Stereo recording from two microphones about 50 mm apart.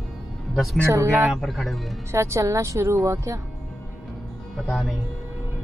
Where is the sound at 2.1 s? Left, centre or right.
Right.